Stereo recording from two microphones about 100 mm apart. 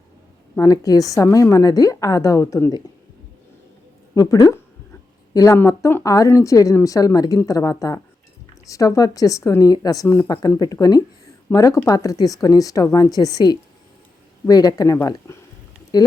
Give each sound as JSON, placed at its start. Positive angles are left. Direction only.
{"t": 0.6, "sound": "speech", "side_deg": 35}
{"t": 4.1, "sound": "speech", "side_deg": 40}
{"t": 5.5, "sound": "speech", "side_deg": 25}